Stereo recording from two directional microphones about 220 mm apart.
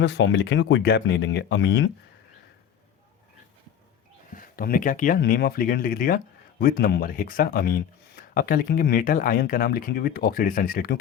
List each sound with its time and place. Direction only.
0.0 s speech: 55° left (ahead or behind)
4.4 s speech: 40° left (ahead or behind)